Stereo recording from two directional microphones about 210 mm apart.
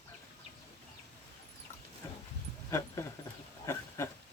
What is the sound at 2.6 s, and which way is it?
Dog, 15° left (ahead or behind).